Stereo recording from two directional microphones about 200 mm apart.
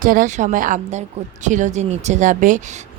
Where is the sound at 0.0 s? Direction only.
40° right (ahead or behind).